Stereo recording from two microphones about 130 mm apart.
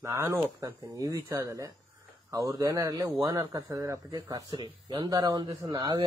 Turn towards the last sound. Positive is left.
turn(degrees=-30)  # may be behind; listen again after turning